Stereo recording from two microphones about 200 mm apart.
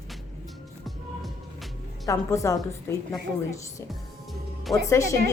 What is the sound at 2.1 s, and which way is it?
Speech, 15° left (ahead or behind).